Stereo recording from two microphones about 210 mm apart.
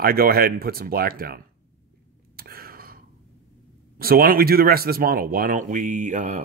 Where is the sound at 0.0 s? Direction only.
45° right (ahead or behind).